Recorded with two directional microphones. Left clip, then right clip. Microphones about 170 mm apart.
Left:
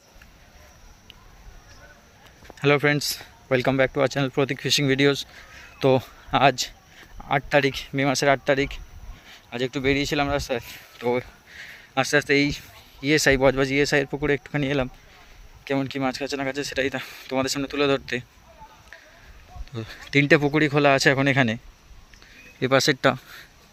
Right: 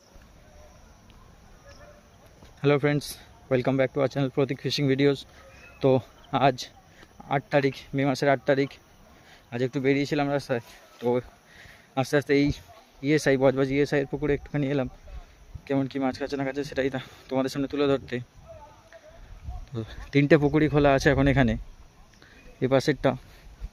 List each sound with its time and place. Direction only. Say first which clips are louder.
2.6 s speech: left 4 dB; 5° right (ahead or behind)
19.7 s speech: left 4 dB; 20° right (ahead or behind)
22.6 s speech: left 4 dB; 15° right (ahead or behind)